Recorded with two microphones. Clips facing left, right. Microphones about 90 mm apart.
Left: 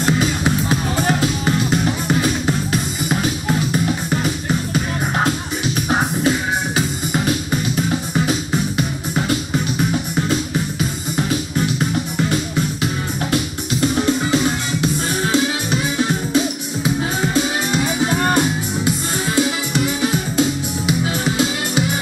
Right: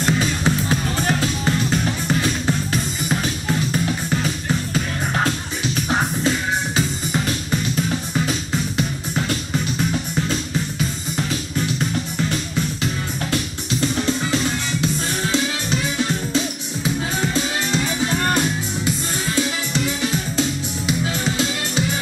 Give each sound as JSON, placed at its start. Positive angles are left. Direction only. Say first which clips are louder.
{"t": 0.0, "sound": "music", "louder": "left 2 dB", "side_deg": 15}
{"t": 3.1, "sound": "music", "louder": "left 4 dB", "side_deg": 15}
{"t": 5.9, "sound": "music", "louder": "left 3 dB", "side_deg": 15}
{"t": 13.3, "sound": "music", "louder": "left 3 dB", "side_deg": 15}